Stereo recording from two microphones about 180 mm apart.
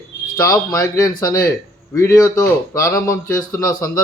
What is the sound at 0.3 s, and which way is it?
A man's voice, 20° left (ahead or behind).